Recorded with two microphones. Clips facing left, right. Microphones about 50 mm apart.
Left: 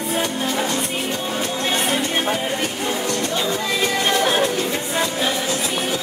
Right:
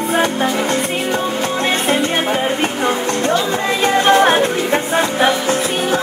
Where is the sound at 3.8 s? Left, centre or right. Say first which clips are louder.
Right 9 dB; right.